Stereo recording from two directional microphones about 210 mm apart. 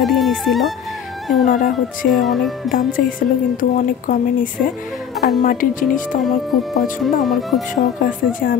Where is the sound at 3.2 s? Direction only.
40° left (ahead or behind).